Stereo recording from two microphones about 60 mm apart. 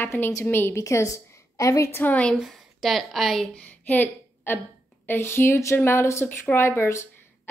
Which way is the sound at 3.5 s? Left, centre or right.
Left.